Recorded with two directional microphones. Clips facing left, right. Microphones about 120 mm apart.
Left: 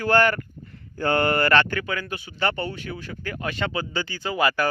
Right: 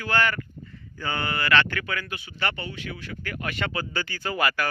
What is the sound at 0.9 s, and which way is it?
Speech, 55° left (ahead or behind).